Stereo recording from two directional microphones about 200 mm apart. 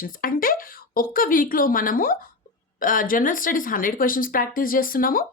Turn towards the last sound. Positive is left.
turn(degrees=45)  # may be behind; listen again after turning